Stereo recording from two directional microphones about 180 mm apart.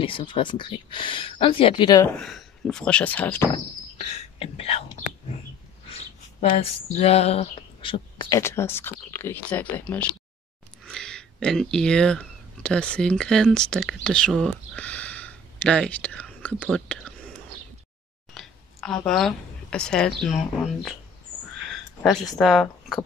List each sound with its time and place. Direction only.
0.0 s speech: 30° left (ahead or behind)
2.1 s speech: 5° left (ahead or behind)
4.4 s speech: 35° left (ahead or behind)
6.9 s speech: 35° left (ahead or behind)
8.4 s speech: 15° left (ahead or behind)
18.3 s a sound: centre (ahead or behind)
19.0 s speech: 5° left (ahead or behind)
22.0 s speech: centre (ahead or behind)